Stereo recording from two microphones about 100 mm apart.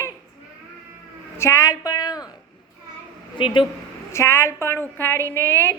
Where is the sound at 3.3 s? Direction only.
55° left (ahead or behind).